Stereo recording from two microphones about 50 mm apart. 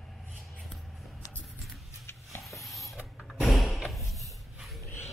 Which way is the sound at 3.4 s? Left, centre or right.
Centre.